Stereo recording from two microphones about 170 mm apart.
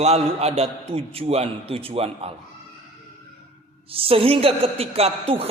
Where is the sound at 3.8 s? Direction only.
35° right (ahead or behind).